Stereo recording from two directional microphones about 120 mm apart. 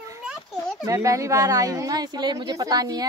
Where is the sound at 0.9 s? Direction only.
25° right (ahead or behind).